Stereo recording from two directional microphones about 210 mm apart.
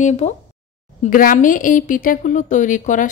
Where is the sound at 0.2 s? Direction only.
35° left (ahead or behind).